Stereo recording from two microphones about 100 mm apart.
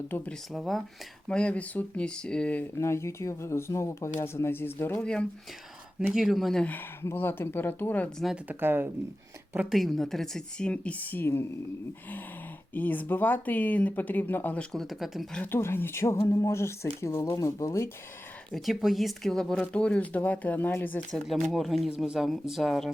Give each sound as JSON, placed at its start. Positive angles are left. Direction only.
{"t": 0.1, "sound": "speech", "side_deg": 15}
{"t": 0.5, "sound": "speech", "side_deg": 0}
{"t": 1.3, "sound": "speech", "side_deg": 10}
{"t": 2.7, "sound": "speech", "side_deg": 30}
{"t": 6.0, "sound": "speech", "side_deg": -5}
{"t": 6.7, "sound": "speech", "side_deg": 20}
{"t": 8.4, "sound": "speech", "side_deg": -20}
{"t": 9.6, "sound": "speech", "side_deg": 0}
{"t": 12.7, "sound": "speech", "side_deg": 20}
{"t": 15.5, "sound": "speech", "side_deg": 25}
{"t": 18.5, "sound": "speech", "side_deg": 0}
{"t": 21.1, "sound": "speech", "side_deg": 0}